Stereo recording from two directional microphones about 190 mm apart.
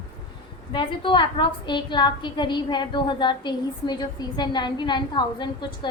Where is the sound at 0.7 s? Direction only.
25° left (ahead or behind).